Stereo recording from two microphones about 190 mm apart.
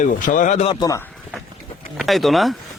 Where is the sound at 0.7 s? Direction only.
20° left (ahead or behind).